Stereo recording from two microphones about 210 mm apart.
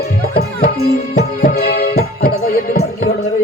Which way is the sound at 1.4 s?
50° left (ahead or behind).